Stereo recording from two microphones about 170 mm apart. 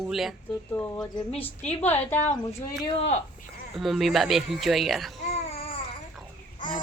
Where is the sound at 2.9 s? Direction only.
40° left (ahead or behind).